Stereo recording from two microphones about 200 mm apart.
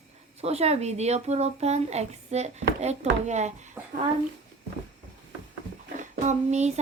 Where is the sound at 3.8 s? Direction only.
10° right (ahead or behind).